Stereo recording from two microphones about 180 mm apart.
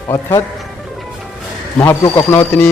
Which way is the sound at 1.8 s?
10° left (ahead or behind).